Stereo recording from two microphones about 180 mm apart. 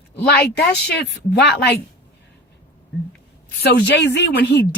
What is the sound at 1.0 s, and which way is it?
Speech, 70° left (ahead or behind).